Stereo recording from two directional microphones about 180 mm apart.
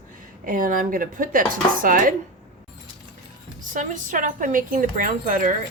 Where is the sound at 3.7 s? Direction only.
45° right (ahead or behind).